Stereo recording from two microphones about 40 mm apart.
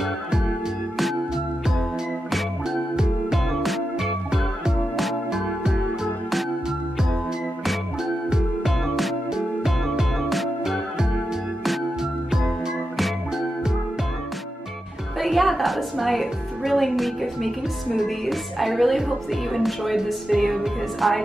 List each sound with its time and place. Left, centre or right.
2.7 s music: centre
3.5 s music: centre
5.3 s music: centre
8.0 s music: centre
8.8 s music: centre
10.6 s music: centre
12.4 s music: centre
15.1 s music: centre
16.7 s speech: centre